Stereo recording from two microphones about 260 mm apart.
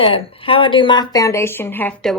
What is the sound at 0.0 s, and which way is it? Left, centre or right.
Speech, left.